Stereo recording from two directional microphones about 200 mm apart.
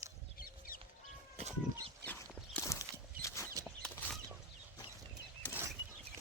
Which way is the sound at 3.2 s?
15° left (ahead or behind).